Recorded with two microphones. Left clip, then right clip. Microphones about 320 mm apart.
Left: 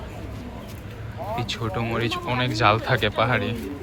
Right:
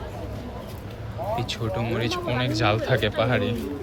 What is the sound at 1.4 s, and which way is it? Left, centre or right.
Speech, centre.